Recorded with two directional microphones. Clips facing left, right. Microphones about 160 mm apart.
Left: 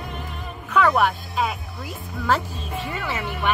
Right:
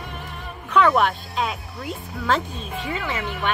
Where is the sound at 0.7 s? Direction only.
5° left (ahead or behind).